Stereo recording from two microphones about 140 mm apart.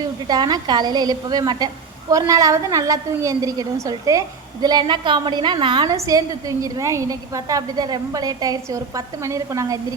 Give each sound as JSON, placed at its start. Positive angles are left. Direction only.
{"t": 0.3, "sound": "a woman's voice", "side_deg": -30}